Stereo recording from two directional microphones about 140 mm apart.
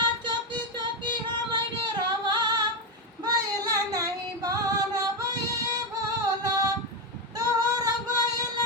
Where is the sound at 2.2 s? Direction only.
30° right (ahead or behind).